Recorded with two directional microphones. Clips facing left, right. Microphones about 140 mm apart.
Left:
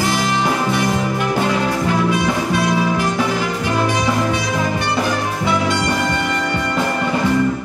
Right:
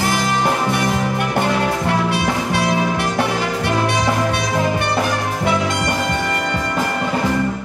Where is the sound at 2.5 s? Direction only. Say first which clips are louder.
Left 1 dB; 65° right (ahead or behind).